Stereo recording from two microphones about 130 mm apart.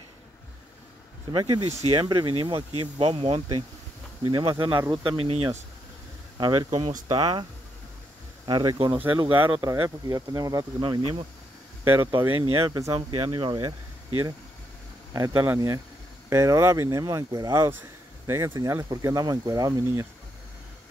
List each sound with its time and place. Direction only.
1.3 s speech: 35° right (ahead or behind)
1.6 s speech: 55° right (ahead or behind)
1.9 s speech: 35° right (ahead or behind)
4.2 s speech: 35° right (ahead or behind)
6.3 s speech: 35° right (ahead or behind)
8.5 s speech: 35° right (ahead or behind)
11.8 s speech: 15° right (ahead or behind)
12.4 s speech: 45° right (ahead or behind)
12.7 s speech: 30° right (ahead or behind)
15.1 s speech: 25° right (ahead or behind)